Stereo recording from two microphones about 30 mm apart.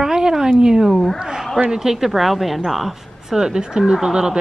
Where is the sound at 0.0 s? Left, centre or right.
Right.